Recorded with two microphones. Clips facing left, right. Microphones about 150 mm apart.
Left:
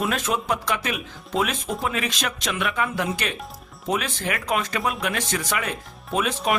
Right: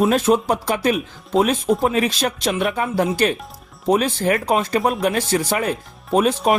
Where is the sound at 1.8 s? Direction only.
35° right (ahead or behind).